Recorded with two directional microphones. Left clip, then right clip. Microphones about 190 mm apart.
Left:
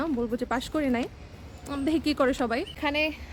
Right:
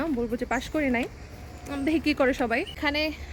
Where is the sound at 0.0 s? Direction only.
10° left (ahead or behind).